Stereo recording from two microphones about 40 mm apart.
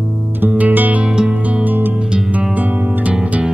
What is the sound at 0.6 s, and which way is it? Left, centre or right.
Music, right.